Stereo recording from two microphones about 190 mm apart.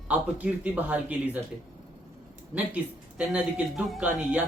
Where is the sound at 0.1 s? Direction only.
10° right (ahead or behind).